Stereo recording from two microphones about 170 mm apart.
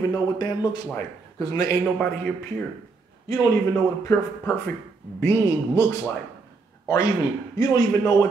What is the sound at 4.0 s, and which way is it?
Speech, 15° left (ahead or behind).